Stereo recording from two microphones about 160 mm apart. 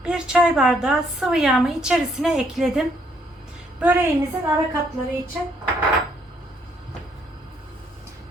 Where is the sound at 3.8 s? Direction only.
15° right (ahead or behind).